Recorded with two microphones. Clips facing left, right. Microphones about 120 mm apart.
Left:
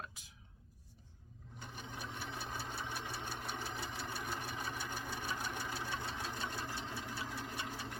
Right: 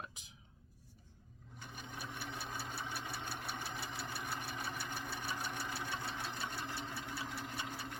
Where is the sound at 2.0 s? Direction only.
5° right (ahead or behind).